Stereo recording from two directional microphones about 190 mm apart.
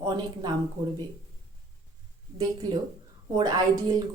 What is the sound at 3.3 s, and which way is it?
Speech, 20° right (ahead or behind).